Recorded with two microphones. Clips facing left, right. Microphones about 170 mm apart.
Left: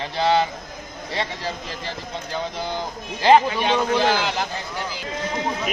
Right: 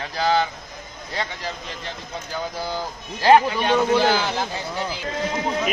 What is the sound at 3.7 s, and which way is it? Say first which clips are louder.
Speech: right 2 dB; 5° right (ahead or behind).